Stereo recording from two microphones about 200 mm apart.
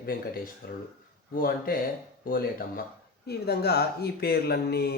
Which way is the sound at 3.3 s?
55° left (ahead or behind).